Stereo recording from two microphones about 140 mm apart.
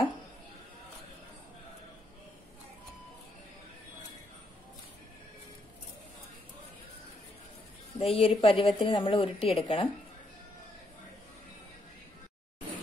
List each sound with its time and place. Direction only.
8.0 s a woman's voice: 40° left (ahead or behind)